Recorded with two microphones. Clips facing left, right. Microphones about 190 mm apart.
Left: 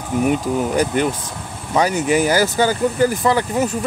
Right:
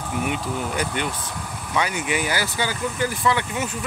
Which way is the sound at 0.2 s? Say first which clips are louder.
Left 9 dB; 40° left (ahead or behind).